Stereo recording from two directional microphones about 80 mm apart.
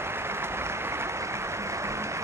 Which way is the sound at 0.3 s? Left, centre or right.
Right.